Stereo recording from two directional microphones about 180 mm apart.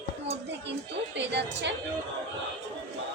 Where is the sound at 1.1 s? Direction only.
75° right (ahead or behind).